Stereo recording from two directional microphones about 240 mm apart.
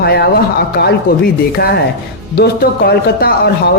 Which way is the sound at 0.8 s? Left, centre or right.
Left.